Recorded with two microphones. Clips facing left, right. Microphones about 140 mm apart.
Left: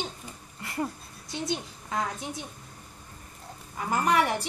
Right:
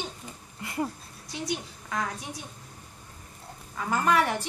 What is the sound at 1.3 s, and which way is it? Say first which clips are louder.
Speech: left 1 dB; 25° left (ahead or behind).